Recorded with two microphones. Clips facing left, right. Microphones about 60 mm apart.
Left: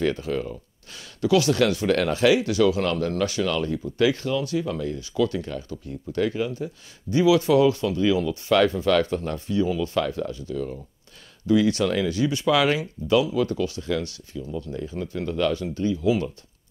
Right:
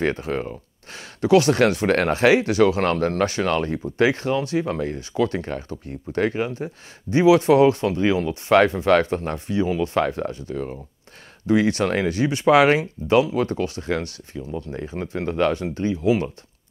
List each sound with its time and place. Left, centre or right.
0.0 s speech: right